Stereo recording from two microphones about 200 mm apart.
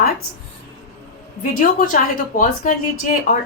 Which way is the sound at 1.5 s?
40° left (ahead or behind).